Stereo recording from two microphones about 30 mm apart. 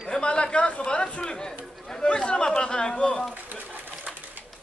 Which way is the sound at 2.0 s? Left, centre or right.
Left.